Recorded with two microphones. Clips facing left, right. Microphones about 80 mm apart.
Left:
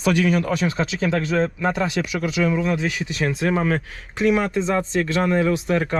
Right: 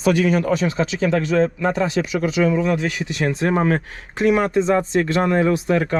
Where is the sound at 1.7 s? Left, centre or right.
Right.